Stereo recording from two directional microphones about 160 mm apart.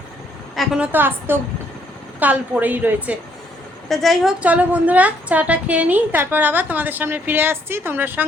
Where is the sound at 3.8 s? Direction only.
Centre (ahead or behind).